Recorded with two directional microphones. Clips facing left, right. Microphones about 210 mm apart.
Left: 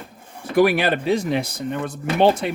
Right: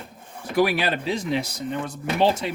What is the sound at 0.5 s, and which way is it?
Speech, 55° left (ahead or behind).